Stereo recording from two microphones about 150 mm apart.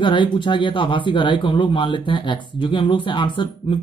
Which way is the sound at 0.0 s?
35° left (ahead or behind).